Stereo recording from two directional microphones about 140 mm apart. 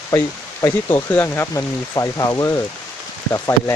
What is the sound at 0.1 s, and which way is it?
Speech, 25° left (ahead or behind).